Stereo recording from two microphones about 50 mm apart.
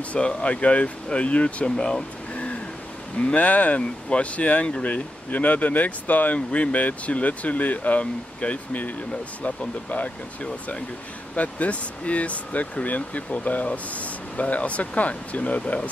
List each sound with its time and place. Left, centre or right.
0.1 s speech: left
3.2 s speech: left